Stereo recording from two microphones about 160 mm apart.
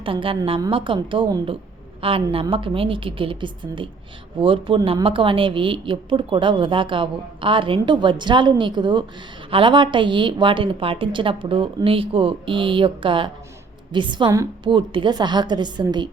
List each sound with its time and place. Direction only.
0.0 s a woman's voice: 35° right (ahead or behind)